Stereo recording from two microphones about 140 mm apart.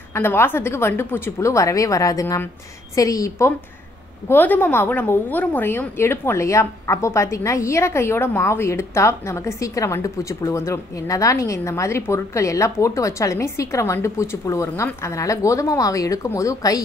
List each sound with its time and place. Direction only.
0.1 s a woman's voice: 15° left (ahead or behind)